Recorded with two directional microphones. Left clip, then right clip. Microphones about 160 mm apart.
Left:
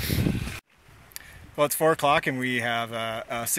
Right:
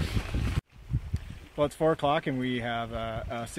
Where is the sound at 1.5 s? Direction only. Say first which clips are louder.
Left 4 dB; 20° left (ahead or behind).